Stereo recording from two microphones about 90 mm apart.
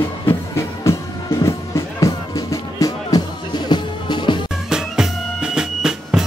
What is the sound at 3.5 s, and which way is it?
Music, 55° left (ahead or behind).